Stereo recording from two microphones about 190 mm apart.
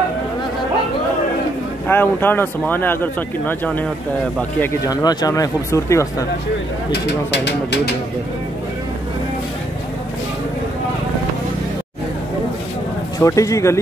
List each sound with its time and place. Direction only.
1.9 s speech: 10° left (ahead or behind)
4.8 s speech: 20° left (ahead or behind)
6.9 s speech: 65° left (ahead or behind)
13.2 s speech: 15° left (ahead or behind)